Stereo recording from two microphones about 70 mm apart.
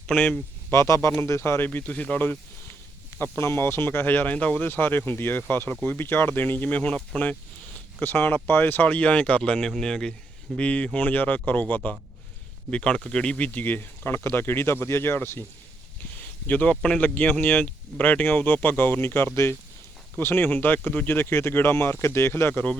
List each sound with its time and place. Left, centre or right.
0.1 s speech: left
0.7 s speech: left
1.6 s speech: left
8.0 s speech: left
16.5 s speech: left
20.1 s speech: left